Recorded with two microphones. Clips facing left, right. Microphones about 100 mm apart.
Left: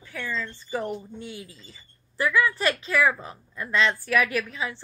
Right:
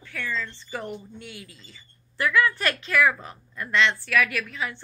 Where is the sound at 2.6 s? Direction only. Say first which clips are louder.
Even; 20° left (ahead or behind).